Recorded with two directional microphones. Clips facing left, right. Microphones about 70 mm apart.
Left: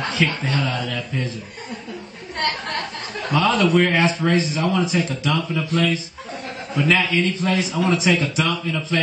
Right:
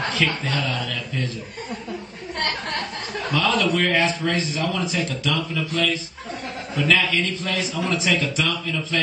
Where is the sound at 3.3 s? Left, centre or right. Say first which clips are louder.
Left 4 dB; left.